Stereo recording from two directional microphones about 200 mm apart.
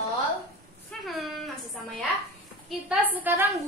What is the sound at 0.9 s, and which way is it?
Speech, 5° left (ahead or behind).